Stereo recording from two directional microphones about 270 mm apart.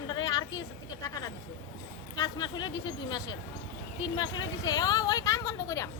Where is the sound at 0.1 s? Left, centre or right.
Centre.